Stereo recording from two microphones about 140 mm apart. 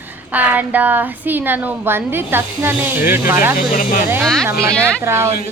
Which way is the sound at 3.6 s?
75° left (ahead or behind).